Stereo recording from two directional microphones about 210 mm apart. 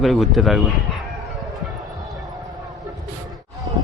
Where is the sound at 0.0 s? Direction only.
Centre (ahead or behind).